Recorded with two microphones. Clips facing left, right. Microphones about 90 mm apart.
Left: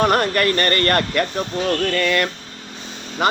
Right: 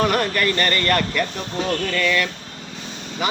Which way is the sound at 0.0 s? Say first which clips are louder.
Left 3 dB; 45° left (ahead or behind).